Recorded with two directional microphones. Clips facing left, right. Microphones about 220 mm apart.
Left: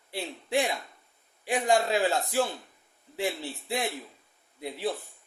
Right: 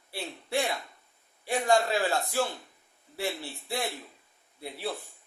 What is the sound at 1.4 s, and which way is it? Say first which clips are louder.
A man's voice: even; 15° left (ahead or behind).